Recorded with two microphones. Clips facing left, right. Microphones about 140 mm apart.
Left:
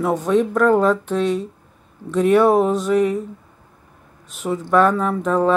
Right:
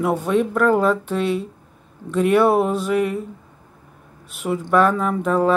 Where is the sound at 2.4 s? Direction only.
10° right (ahead or behind).